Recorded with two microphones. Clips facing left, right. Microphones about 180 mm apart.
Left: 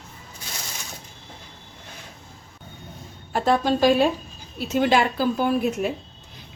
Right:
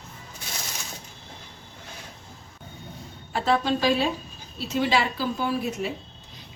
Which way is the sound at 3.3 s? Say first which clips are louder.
Left 3 dB; 45° left (ahead or behind).